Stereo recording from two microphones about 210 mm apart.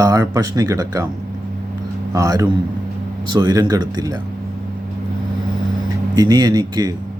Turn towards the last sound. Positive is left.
turn(degrees=-20)  # may be behind; listen again after turning